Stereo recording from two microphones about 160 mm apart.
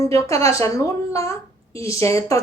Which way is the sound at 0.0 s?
20° left (ahead or behind).